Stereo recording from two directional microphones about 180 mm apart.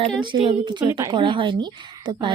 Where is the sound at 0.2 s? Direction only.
25° right (ahead or behind).